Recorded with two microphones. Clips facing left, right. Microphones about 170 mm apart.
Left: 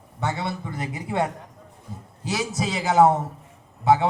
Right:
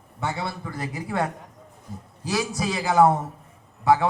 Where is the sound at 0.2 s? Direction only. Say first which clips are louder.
Left 2 dB; 20° left (ahead or behind).